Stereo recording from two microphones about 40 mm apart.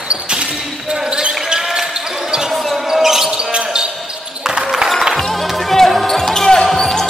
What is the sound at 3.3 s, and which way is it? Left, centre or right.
Basketball bounce, right.